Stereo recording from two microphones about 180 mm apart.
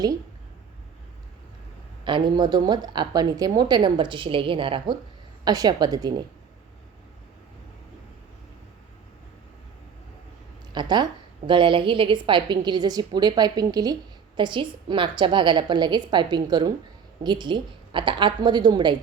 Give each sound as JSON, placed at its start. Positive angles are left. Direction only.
{"t": 2.0, "sound": "a woman's voice", "side_deg": -25}
{"t": 10.7, "sound": "a woman's voice", "side_deg": -25}